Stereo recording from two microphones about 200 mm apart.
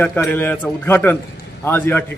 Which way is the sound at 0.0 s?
10° left (ahead or behind).